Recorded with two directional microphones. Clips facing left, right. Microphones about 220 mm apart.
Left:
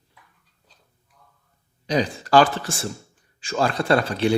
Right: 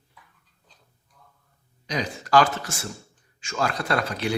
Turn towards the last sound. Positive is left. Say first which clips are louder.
# left 6 dB
turn(degrees=30)  # may be behind; listen again after turning